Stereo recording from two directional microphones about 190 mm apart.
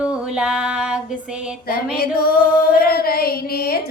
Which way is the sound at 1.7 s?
55° left (ahead or behind).